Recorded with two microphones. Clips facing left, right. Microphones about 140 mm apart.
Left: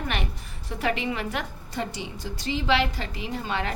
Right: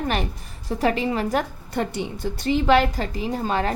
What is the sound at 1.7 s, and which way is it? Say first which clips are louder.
A woman's voice: right 6 dB; 55° right (ahead or behind).